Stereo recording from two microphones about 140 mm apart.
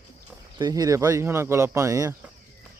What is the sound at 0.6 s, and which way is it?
Speech, 25° right (ahead or behind).